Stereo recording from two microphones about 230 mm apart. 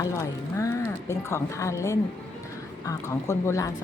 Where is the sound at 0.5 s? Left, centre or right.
Centre.